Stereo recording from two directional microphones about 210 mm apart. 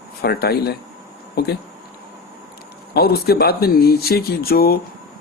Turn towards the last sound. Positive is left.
turn(degrees=45)  # may be behind; listen again after turning